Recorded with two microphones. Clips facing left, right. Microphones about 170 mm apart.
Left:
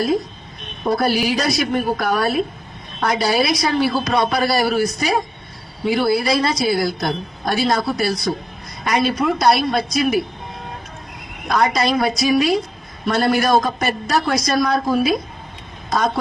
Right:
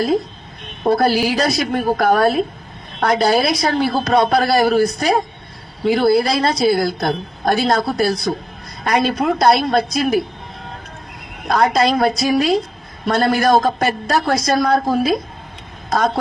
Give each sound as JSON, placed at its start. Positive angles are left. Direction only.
{"t": 0.9, "sound": "a woman's voice", "side_deg": -55}
{"t": 11.4, "sound": "a woman's voice", "side_deg": -50}